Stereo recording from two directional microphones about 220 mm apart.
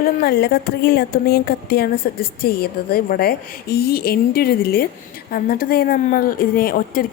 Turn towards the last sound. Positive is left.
turn(degrees=40)  # may be behind; listen again after turning